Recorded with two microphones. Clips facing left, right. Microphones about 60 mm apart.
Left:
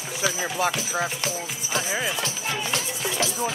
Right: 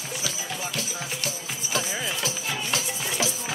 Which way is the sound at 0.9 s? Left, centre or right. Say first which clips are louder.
Left 6 dB; left.